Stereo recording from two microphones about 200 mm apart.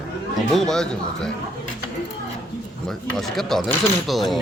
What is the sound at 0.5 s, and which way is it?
Speech, centre (ahead or behind).